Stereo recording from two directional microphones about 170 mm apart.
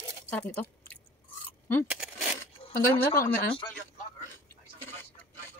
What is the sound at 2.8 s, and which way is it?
Speech, 15° left (ahead or behind).